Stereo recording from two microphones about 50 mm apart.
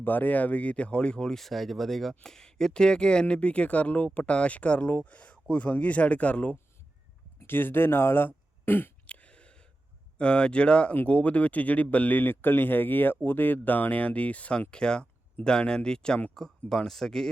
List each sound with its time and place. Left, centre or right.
0.0 s speech: left; by 1.4 s centre
1.4 s speech: centre; by 6.6 s left
7.4 s speech: left
8.6 s throat clearing: left
9.0 s a sound: left
10.2 s speech: left
10.9 s speech: left
14.7 s speech: centre